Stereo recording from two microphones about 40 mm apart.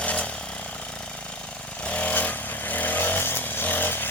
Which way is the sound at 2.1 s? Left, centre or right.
Left.